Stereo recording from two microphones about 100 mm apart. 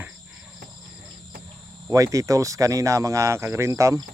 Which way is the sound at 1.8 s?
35° right (ahead or behind).